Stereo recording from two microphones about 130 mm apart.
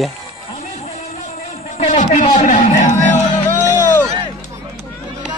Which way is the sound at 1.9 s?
70° left (ahead or behind).